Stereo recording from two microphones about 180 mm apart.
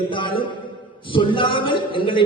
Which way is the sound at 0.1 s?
30° left (ahead or behind).